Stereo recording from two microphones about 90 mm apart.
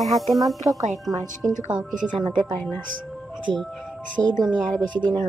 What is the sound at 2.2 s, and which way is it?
Speech, 60° right (ahead or behind).